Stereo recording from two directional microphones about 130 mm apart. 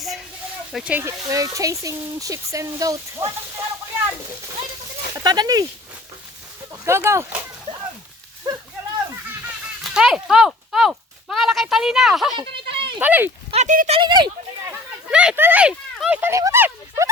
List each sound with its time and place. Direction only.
0.7 s speech: centre (ahead or behind)
0.9 s speech: 25° right (ahead or behind)
5.1 s speech: 30° right (ahead or behind)
6.8 s speech: 20° right (ahead or behind)
9.8 s a sound: 5° right (ahead or behind)
12.4 s a sound: 45° right (ahead or behind)
13.0 s speech: 15° right (ahead or behind)
13.5 s speech: 65° right (ahead or behind)
13.9 s speech: 35° right (ahead or behind)
14.7 s a sound: 10° right (ahead or behind)
16.0 s speech: 10° right (ahead or behind)
16.3 s speech: 20° right (ahead or behind)